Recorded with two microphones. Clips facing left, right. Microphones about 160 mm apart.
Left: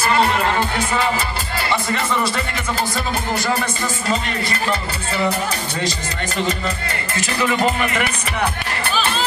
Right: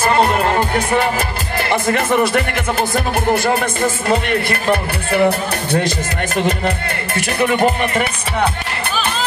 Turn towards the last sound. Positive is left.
turn(degrees=-55)  # may be behind; listen again after turning